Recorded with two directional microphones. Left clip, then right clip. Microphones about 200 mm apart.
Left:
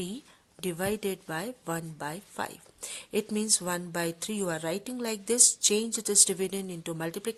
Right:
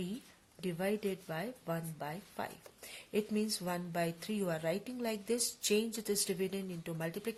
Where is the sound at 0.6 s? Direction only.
45° left (ahead or behind).